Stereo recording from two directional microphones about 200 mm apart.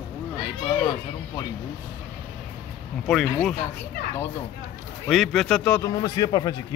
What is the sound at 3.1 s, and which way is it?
Speech, 5° left (ahead or behind).